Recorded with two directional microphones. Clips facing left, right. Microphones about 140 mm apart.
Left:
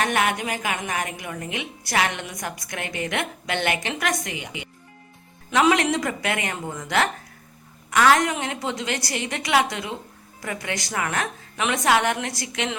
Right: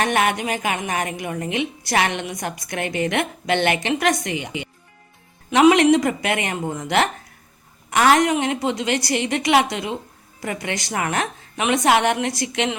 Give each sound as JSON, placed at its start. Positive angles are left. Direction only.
{"t": 0.0, "sound": "a woman's voice", "side_deg": -25}